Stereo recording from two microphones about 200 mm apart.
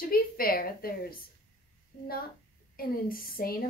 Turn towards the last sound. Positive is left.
turn(degrees=45)  # may be behind; listen again after turning